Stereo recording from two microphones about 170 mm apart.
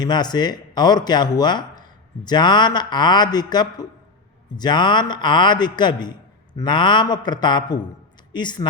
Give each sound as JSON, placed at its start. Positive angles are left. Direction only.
{"t": 0.0, "sound": "speech", "side_deg": 25}